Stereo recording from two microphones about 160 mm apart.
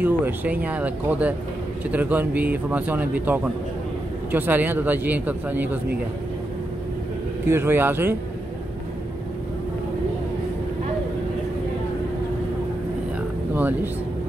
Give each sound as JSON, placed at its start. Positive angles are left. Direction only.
{"t": 0.0, "sound": "a man's voice", "side_deg": -10}
{"t": 7.4, "sound": "a man's voice", "side_deg": -15}